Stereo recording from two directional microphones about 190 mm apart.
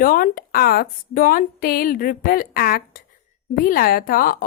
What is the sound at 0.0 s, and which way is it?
Speech, 50° left (ahead or behind).